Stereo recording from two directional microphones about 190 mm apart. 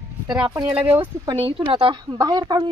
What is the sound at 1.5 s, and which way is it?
A woman's voice, 25° right (ahead or behind).